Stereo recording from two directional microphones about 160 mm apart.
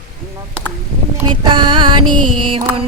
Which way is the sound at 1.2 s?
30° right (ahead or behind).